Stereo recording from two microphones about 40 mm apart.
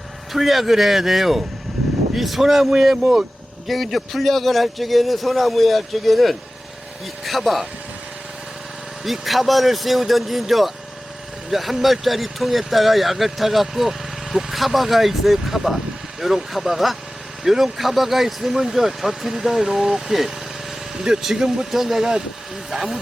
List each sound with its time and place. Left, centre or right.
0.3 s speech: centre
3.7 s speech: centre
9.0 s speech: centre